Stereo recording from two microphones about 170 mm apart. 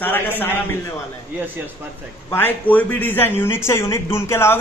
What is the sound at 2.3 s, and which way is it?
Speech, 10° left (ahead or behind).